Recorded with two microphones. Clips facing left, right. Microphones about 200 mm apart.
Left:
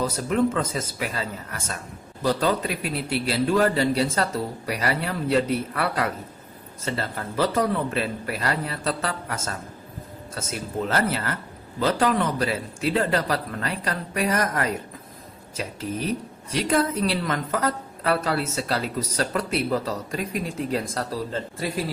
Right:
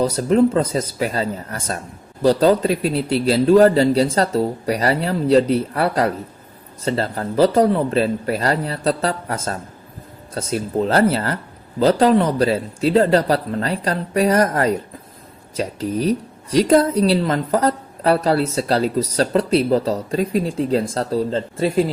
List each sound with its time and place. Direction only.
0.0 s a woman's voice: 30° right (ahead or behind)